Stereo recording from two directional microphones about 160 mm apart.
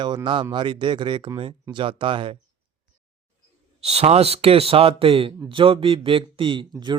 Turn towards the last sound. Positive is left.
turn(degrees=-30)  # may be behind; listen again after turning